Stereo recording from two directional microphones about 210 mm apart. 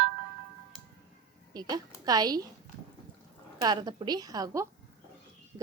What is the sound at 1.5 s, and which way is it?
A woman's voice, 20° right (ahead or behind).